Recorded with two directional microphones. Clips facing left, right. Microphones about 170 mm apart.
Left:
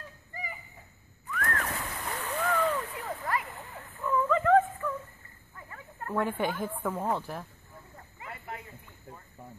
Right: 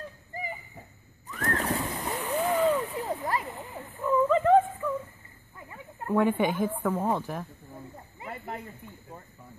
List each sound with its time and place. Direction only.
1.4 s splash: 25° right (ahead or behind)
5.7 s chicken: 15° right (ahead or behind)
7.0 s speech: 15° right (ahead or behind)